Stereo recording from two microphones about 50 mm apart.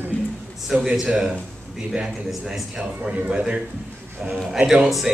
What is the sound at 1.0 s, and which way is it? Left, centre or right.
A man's voice, centre.